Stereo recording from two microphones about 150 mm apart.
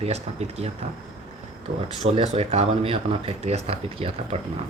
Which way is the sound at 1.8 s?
45° right (ahead or behind).